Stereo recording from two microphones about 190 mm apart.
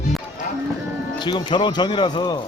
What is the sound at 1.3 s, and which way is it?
Speech, 25° left (ahead or behind).